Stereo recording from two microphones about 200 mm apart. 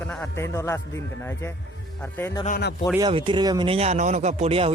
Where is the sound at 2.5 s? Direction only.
50° left (ahead or behind).